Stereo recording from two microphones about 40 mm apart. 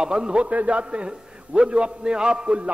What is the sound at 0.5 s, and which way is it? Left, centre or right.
A man's voice, right.